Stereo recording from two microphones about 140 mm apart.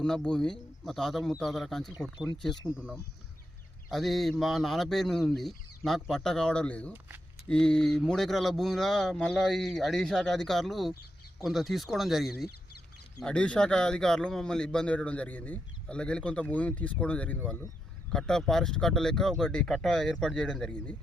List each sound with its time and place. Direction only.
0.0 s speech: 5° left (ahead or behind)
13.2 s speech: 10° left (ahead or behind)